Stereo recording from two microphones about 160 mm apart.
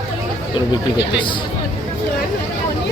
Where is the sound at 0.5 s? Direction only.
30° left (ahead or behind).